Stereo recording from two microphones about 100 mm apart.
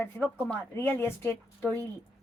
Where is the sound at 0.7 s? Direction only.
20° left (ahead or behind).